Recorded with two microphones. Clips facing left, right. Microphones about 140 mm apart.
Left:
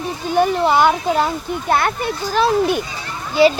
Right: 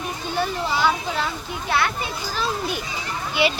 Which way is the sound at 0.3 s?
55° left (ahead or behind).